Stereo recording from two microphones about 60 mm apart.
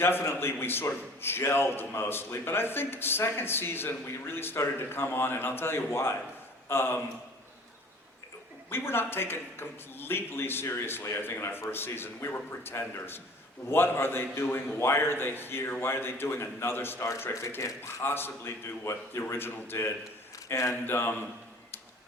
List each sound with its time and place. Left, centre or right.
0.0 s a man's voice: left
8.7 s a man's voice: left
17.6 s a man's voice: left
18.0 s a man's voice: left
20.5 s a man's voice: left
20.8 s a man's voice: left